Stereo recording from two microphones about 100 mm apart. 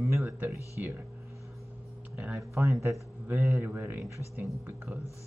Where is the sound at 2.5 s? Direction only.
30° right (ahead or behind).